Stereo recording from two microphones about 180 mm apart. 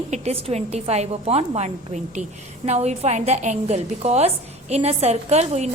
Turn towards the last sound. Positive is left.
turn(degrees=-40)  # may be behind; listen again after turning